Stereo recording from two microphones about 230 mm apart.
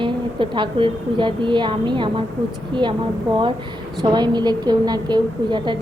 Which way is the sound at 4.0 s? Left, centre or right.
Centre.